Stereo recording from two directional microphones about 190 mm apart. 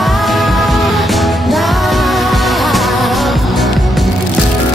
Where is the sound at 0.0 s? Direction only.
Centre (ahead or behind).